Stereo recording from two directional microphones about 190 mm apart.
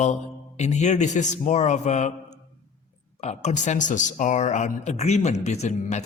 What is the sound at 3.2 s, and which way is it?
Speech, 35° left (ahead or behind).